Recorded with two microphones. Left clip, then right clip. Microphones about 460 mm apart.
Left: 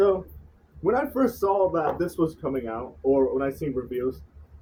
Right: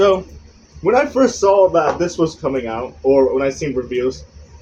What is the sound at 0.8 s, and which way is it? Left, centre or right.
Speech, left.